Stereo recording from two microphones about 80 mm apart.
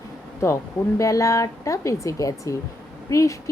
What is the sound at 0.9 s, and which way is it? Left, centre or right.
A woman's voice, left.